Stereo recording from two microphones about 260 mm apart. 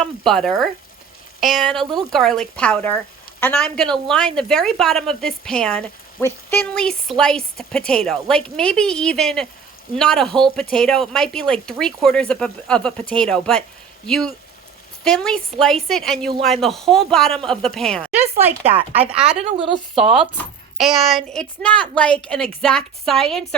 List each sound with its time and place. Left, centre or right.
0.0 s speech: centre
18.1 s speech: centre
18.6 s speech: right
18.9 s a child's voice: centre